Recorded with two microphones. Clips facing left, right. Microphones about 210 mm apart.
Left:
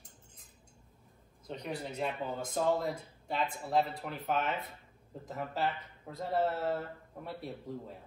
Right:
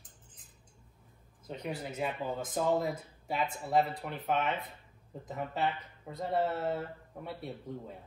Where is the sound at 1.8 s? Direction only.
5° right (ahead or behind).